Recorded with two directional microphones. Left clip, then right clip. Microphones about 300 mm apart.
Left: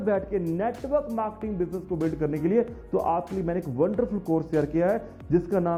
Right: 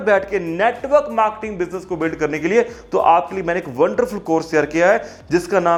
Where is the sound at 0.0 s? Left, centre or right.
Centre.